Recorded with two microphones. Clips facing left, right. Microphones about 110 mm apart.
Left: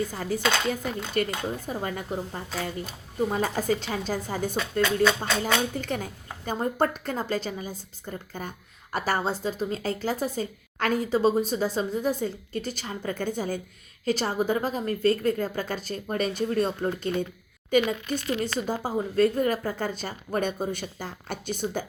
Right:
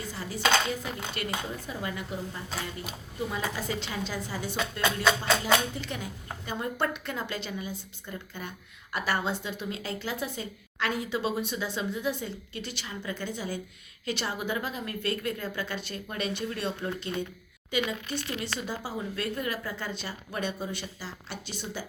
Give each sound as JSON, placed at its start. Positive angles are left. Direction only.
{"t": 0.1, "sound": "speech", "side_deg": 50}
{"t": 5.7, "sound": "a woman's voice", "side_deg": 45}